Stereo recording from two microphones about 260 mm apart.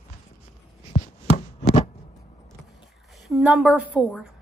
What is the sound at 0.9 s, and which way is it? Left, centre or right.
Chopping, left.